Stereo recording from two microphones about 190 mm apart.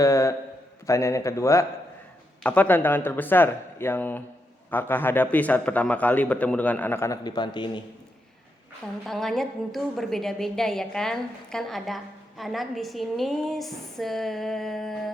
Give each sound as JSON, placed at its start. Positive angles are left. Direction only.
{"t": 0.0, "sound": "a man's voice", "side_deg": 15}
{"t": 9.0, "sound": "a woman's voice", "side_deg": 0}